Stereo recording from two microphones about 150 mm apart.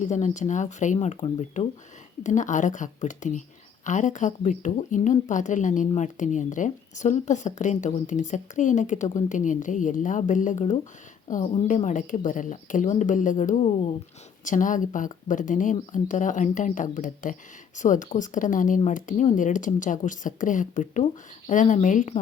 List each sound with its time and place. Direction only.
0.0 s a woman's voice: 55° left (ahead or behind)
14.4 s a woman's voice: 60° left (ahead or behind)